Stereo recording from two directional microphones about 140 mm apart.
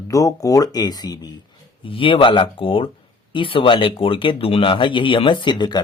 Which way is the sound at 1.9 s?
40° left (ahead or behind).